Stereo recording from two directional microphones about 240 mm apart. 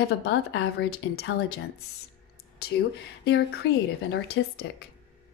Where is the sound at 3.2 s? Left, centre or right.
Left.